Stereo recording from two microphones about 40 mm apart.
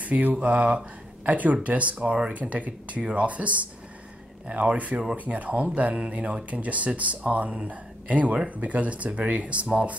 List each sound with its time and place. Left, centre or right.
0.0 s speech: right